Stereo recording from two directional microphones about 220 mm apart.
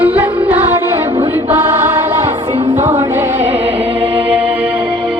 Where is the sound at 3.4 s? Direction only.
25° right (ahead or behind).